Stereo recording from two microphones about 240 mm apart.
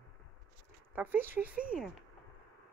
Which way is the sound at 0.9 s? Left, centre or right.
Centre.